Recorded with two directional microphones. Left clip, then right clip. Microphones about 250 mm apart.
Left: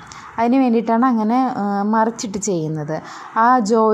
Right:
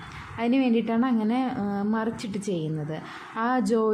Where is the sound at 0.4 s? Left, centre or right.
Left.